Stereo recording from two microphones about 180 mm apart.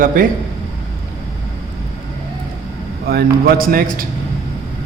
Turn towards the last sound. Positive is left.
turn(degrees=-55)  # may be behind; listen again after turning